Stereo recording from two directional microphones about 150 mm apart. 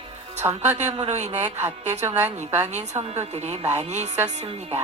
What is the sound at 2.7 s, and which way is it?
A woman's voice, 50° right (ahead or behind).